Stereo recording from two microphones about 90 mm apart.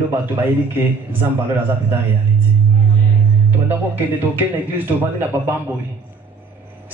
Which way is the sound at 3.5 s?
25° right (ahead or behind).